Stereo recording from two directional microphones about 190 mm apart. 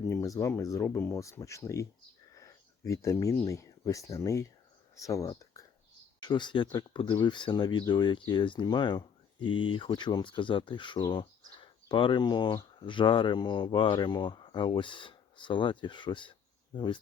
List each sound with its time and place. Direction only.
0.1 s speech: 15° left (ahead or behind)